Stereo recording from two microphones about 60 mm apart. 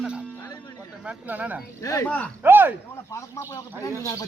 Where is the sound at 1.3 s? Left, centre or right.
Right.